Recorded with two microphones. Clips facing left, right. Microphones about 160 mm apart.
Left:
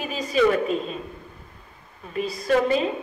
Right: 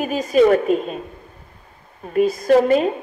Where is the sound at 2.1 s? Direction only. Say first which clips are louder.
Right 8 dB; 50° right (ahead or behind).